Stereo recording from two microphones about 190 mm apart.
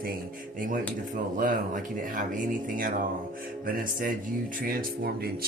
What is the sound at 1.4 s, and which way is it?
Speech, 45° right (ahead or behind).